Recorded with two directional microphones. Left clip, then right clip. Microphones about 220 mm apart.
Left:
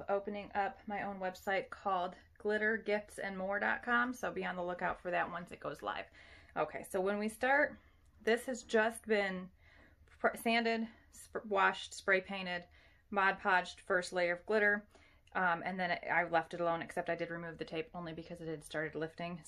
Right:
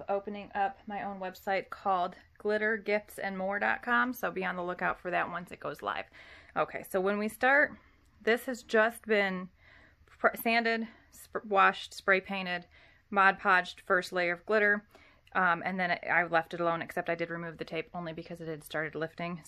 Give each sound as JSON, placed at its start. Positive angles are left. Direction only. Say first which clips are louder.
{"t": 0.0, "sound": "speech", "louder": "right 3 dB", "side_deg": -25}